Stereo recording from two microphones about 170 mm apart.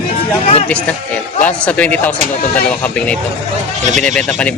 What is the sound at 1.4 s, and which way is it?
A man's voice, 5° left (ahead or behind).